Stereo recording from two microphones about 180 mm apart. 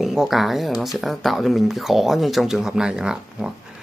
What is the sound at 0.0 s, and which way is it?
Speech, centre (ahead or behind).